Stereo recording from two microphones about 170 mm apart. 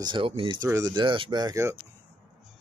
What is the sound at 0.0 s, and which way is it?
Speech, 30° right (ahead or behind).